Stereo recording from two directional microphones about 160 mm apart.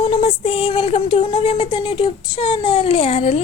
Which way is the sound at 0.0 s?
35° left (ahead or behind).